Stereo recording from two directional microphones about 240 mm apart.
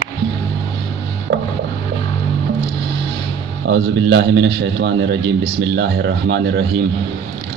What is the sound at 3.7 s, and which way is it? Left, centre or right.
A man's voice, right.